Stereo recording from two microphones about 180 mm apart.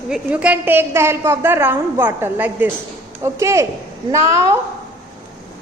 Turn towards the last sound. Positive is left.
turn(degrees=-15)  # may be behind; listen again after turning